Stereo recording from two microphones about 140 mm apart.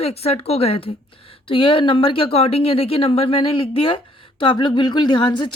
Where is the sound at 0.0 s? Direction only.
45° left (ahead or behind).